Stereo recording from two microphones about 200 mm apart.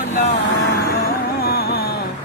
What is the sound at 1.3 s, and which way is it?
Music, 50° left (ahead or behind).